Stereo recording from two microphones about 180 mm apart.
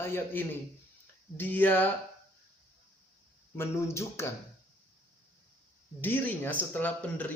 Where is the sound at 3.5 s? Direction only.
15° left (ahead or behind).